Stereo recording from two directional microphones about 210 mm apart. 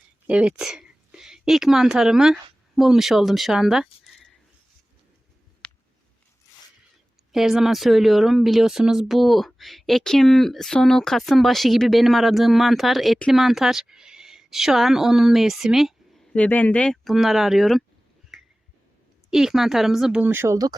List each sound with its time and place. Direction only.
0.3 s speech: 5° right (ahead or behind)
5.6 s a sound: 5° left (ahead or behind)
7.3 s speech: centre (ahead or behind)
18.3 s finger snapping: centre (ahead or behind)
19.3 s speech: centre (ahead or behind)